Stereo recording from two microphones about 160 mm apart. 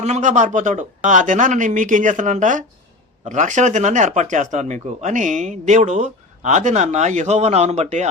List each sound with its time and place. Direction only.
0.0 s speech: 50° right (ahead or behind)